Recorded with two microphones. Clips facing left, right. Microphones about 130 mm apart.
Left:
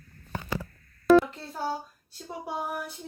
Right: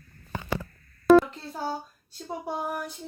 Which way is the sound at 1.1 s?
Centre (ahead or behind).